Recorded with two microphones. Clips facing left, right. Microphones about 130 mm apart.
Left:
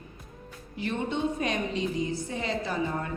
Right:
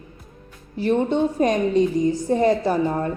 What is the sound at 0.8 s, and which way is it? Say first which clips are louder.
A woman's voice: right 10 dB; 40° right (ahead or behind).